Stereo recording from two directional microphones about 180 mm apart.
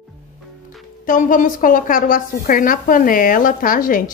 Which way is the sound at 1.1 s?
50° left (ahead or behind).